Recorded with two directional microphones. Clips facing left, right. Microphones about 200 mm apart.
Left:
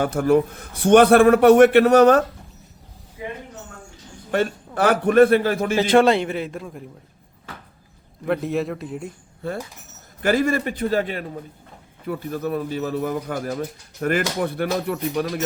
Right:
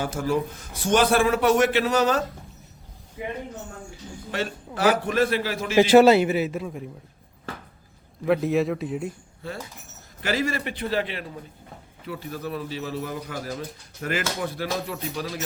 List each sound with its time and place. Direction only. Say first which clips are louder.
0.0 s a man's voice: left 7 dB; 60° left (ahead or behind)
4.3 s speech: left 8 dB; 55° left (ahead or behind)
5.7 s a man's voice: right 3 dB; 5° right (ahead or behind)
8.2 s a man's voice: right 1 dB; centre (ahead or behind)
9.4 s speech: left 6 dB; 55° left (ahead or behind)